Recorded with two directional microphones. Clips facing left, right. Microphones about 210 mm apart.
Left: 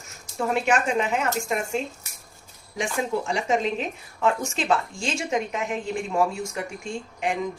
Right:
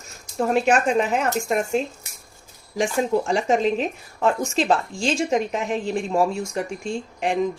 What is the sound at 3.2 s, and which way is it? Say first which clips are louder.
A woman's voice: right 4 dB; 40° right (ahead or behind).